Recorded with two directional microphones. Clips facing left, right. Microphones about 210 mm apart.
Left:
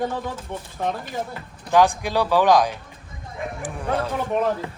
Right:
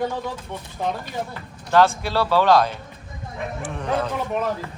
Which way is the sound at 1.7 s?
15° left (ahead or behind).